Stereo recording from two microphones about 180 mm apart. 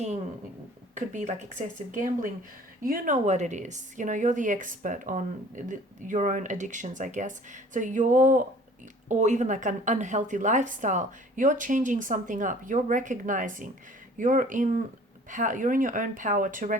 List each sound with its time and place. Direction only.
0.9 s a woman's voice: 45° right (ahead or behind)